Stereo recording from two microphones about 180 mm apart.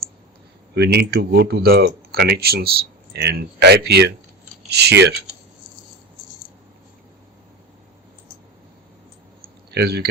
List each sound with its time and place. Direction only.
0.7 s speech: 60° right (ahead or behind)
9.4 s clicking: 60° right (ahead or behind)